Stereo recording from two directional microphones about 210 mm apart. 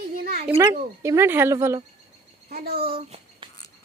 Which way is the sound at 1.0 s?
10° right (ahead or behind).